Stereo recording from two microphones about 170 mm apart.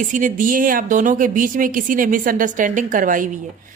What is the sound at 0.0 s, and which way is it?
Speech, 50° right (ahead or behind).